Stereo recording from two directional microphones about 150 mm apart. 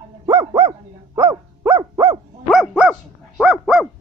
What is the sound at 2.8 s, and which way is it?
Dog, 5° right (ahead or behind).